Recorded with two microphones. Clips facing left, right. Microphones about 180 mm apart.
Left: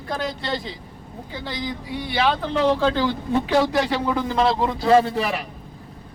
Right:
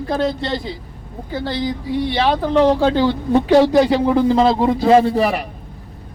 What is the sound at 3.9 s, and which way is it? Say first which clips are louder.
Speech: right 8 dB; 25° right (ahead or behind).